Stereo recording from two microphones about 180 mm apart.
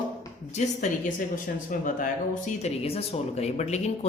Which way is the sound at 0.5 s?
40° left (ahead or behind).